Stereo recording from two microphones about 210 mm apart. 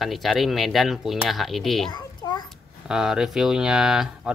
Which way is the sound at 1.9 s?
20° left (ahead or behind).